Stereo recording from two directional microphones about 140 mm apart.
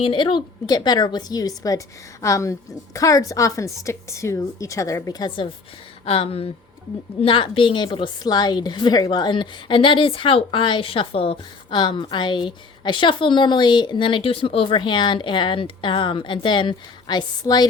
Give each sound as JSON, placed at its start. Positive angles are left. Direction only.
{"t": 0.0, "sound": "a woman's voice", "side_deg": 35}
{"t": 6.1, "sound": "a woman's voice", "side_deg": 40}